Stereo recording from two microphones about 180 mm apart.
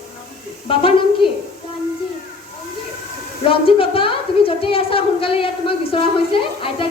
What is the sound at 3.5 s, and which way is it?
A woman's voice, 30° left (ahead or behind).